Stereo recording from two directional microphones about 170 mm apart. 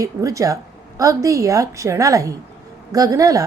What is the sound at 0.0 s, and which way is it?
A woman's voice, 20° right (ahead or behind).